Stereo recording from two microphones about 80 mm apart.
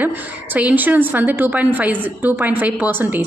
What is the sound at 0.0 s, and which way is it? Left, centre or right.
A woman's voice, right.